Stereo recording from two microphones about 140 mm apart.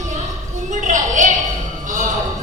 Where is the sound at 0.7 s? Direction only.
60° right (ahead or behind).